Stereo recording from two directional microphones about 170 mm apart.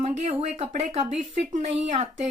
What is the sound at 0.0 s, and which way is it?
Speech, 40° right (ahead or behind).